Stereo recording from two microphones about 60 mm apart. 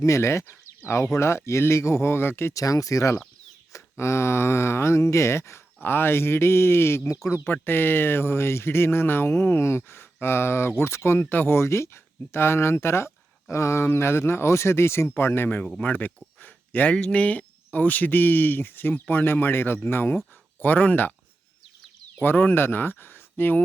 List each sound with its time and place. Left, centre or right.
0.0 s speech: left
2.5 s speech: left
7.4 s speech: left
11.2 s speech: left
11.5 s speech: left
16.9 s speech: left
22.2 s speech: left